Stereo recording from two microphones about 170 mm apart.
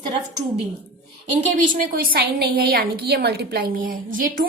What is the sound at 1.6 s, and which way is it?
A woman's voice, 55° right (ahead or behind).